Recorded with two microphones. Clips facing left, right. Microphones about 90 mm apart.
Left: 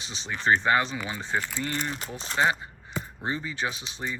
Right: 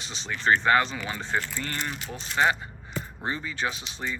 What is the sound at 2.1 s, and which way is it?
Speech, 25° left (ahead or behind).